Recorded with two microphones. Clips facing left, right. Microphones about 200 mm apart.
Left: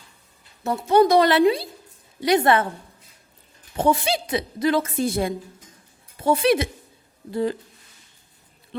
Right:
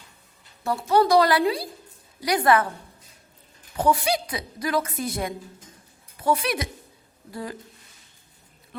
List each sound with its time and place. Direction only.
0.6 s a woman's voice: 20° left (ahead or behind)
3.8 s a woman's voice: 25° left (ahead or behind)